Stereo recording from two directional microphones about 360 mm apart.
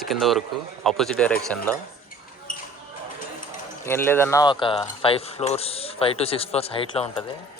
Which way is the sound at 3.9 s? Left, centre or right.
Centre.